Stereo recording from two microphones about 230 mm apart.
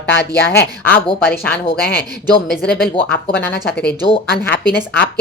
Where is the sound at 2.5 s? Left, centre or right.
Left.